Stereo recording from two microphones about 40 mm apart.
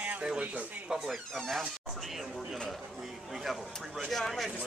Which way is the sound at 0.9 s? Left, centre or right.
Centre.